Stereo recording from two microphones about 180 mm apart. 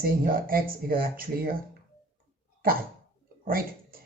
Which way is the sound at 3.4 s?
55° right (ahead or behind).